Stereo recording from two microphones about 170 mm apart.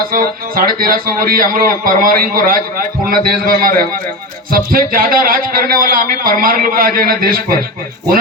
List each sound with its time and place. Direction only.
0.1 s a man's voice: 60° right (ahead or behind)